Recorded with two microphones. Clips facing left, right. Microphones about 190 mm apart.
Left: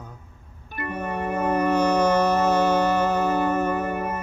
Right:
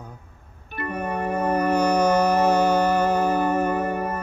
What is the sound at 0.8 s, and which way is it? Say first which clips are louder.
Music: right 1 dB; 15° right (ahead or behind).